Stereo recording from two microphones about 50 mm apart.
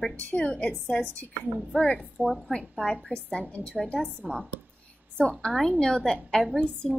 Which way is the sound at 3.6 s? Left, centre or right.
Right.